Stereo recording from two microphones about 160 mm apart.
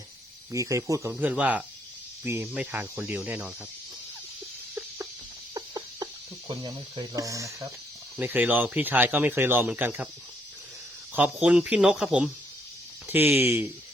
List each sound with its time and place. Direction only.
0.5 s speech: 20° right (ahead or behind)
5.5 s chicken: 25° right (ahead or behind)
6.5 s speech: 25° right (ahead or behind); by 10.1 s 10° right (ahead or behind)
11.1 s speech: 10° right (ahead or behind)